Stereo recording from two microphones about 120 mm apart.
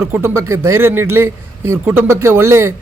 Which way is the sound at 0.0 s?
20° right (ahead or behind).